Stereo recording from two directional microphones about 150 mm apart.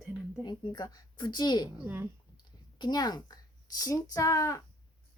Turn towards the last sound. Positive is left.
turn(degrees=20)  # may be behind; listen again after turning